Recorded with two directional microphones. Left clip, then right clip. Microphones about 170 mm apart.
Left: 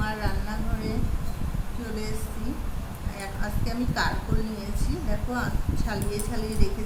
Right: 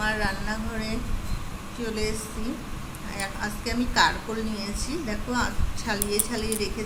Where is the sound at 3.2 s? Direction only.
20° right (ahead or behind).